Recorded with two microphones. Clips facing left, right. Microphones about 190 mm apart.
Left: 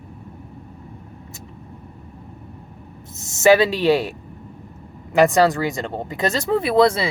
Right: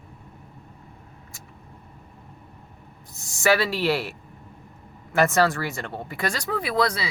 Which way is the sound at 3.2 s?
20° left (ahead or behind).